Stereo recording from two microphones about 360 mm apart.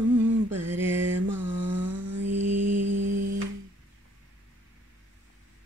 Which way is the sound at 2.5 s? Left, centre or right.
Centre.